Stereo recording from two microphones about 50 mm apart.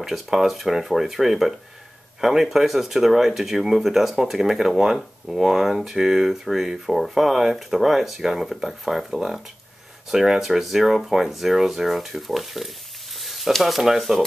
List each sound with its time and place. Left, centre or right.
0.0 s speech: centre